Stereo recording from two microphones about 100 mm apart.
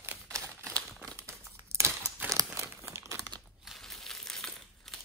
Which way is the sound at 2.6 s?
25° right (ahead or behind).